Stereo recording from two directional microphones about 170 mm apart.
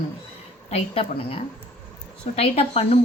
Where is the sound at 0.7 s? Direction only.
35° left (ahead or behind).